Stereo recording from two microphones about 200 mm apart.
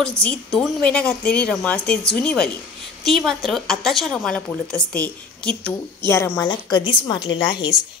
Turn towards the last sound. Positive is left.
turn(degrees=20)  # may be behind; listen again after turning